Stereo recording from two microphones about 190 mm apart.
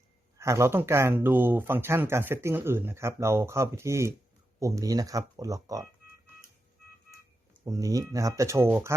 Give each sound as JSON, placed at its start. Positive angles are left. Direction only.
{"t": 0.3, "sound": "speech", "side_deg": -15}
{"t": 7.6, "sound": "speech", "side_deg": -15}